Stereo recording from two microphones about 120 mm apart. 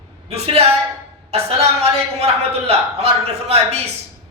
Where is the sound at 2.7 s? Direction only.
60° right (ahead or behind).